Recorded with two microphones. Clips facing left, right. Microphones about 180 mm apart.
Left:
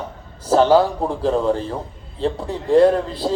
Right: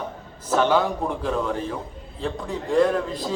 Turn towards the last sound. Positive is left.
turn(degrees=30)  # may be behind; listen again after turning